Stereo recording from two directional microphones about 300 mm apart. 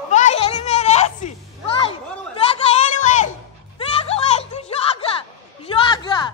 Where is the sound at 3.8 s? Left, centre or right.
Centre.